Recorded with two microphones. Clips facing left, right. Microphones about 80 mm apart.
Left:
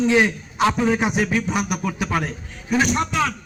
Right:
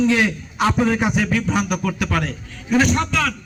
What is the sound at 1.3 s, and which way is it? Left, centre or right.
A man's voice, left.